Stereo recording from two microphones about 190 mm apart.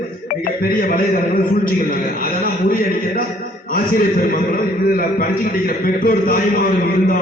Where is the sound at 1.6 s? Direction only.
50° left (ahead or behind).